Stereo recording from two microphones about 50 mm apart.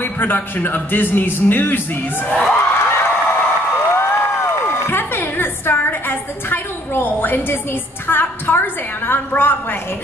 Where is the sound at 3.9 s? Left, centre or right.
Left.